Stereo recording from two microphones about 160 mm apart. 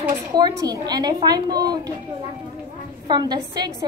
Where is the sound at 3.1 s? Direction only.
25° right (ahead or behind).